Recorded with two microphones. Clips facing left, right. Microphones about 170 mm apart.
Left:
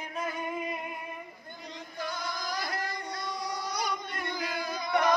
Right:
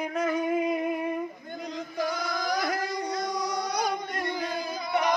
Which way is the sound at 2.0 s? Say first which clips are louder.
Right 6 dB; 90° right.